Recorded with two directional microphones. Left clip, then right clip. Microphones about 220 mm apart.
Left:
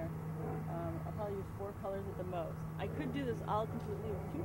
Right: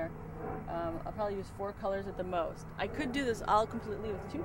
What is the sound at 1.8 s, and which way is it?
Speech, 25° right (ahead or behind).